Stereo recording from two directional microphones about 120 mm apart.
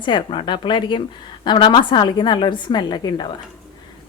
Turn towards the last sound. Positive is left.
turn(degrees=35)  # may be behind; listen again after turning